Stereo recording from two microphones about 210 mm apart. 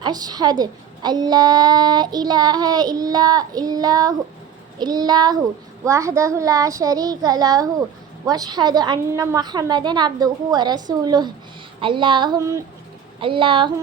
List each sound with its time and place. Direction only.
0.0 s a woman's voice: 20° right (ahead or behind)
13.1 s a woman's voice: 25° right (ahead or behind)